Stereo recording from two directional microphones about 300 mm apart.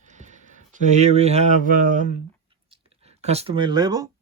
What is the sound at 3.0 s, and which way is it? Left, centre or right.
Speech, right.